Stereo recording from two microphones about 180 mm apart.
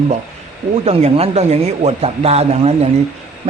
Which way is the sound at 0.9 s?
35° right (ahead or behind).